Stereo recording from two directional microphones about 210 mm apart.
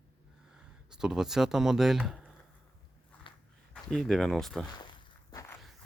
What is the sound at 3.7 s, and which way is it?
Speech, centre (ahead or behind).